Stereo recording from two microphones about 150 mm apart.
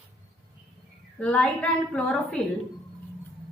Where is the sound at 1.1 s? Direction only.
10° left (ahead or behind).